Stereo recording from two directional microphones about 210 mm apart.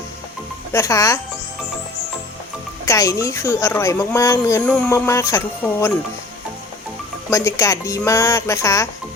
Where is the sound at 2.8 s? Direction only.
15° left (ahead or behind).